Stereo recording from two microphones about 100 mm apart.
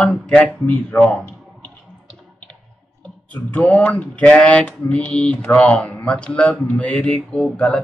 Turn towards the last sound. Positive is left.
turn(degrees=10)  # may be behind; listen again after turning